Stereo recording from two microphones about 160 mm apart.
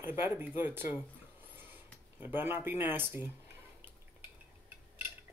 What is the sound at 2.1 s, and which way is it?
Speech, 15° right (ahead or behind).